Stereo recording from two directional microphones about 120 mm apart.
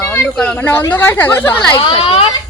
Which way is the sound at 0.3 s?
10° left (ahead or behind).